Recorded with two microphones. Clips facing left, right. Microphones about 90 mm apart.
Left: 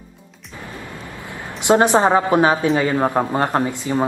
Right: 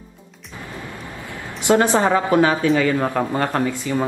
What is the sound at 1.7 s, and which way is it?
A woman's voice, 20° left (ahead or behind).